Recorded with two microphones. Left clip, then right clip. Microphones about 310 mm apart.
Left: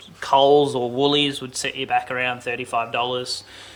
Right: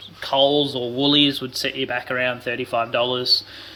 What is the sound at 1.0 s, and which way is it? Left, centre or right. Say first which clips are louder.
Speech: right 3 dB; centre.